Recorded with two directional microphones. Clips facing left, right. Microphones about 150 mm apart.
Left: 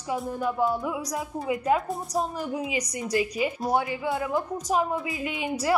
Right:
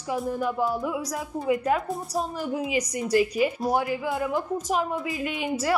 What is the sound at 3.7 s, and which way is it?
Speech, 5° right (ahead or behind).